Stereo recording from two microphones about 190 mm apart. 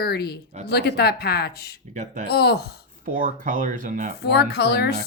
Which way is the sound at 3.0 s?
45° right (ahead or behind).